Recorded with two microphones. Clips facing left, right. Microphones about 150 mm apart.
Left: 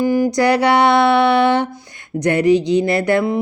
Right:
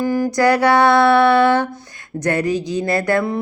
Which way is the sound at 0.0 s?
15° left (ahead or behind).